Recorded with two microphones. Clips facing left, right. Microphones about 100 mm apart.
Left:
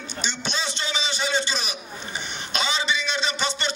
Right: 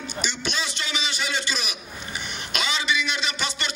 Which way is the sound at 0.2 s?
30° left (ahead or behind).